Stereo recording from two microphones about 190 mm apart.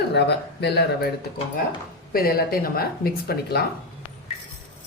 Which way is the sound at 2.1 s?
50° left (ahead or behind).